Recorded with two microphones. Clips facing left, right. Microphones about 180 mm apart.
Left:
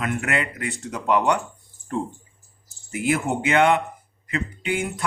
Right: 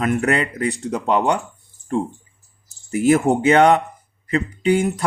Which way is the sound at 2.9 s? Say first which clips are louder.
Right 8 dB; 40° right (ahead or behind).